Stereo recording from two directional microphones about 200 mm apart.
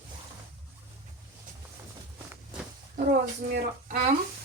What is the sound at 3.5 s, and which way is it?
Speech, 55° right (ahead or behind).